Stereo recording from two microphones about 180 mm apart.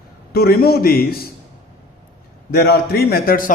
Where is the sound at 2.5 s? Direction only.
60° left (ahead or behind).